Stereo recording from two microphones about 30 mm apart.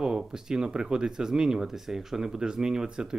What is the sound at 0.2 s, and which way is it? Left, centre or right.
Speech, centre.